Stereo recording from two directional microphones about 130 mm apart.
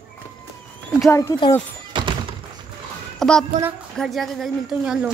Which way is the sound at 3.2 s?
5° left (ahead or behind).